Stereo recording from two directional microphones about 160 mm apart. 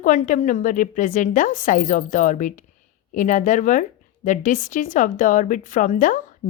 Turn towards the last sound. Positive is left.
turn(degrees=55)  # may be behind; listen again after turning